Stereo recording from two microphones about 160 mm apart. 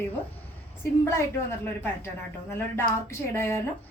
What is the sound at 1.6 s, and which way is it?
A woman's voice, 15° left (ahead or behind).